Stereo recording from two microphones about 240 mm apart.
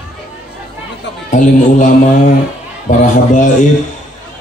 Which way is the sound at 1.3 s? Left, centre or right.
Left.